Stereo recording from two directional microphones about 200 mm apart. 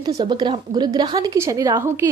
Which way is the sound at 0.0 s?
20° right (ahead or behind).